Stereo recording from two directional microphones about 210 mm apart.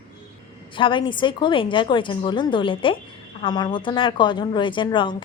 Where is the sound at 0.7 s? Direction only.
25° left (ahead or behind).